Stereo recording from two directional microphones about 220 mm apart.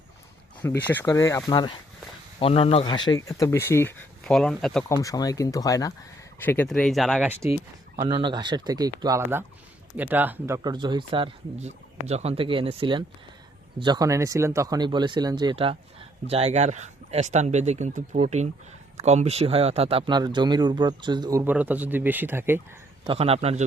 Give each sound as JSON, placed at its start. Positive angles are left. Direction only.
{"t": 0.9, "sound": "speech", "side_deg": 10}
{"t": 4.9, "sound": "a man's voice", "side_deg": 15}
{"t": 23.0, "sound": "a man's voice", "side_deg": -25}